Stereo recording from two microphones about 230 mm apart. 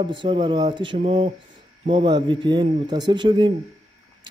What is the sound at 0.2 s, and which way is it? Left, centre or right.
A man's voice, centre.